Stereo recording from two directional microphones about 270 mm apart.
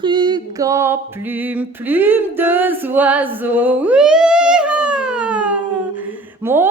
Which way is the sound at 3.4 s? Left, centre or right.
Centre.